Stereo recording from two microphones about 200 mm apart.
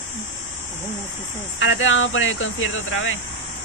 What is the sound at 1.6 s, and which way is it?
Speech, 70° left (ahead or behind).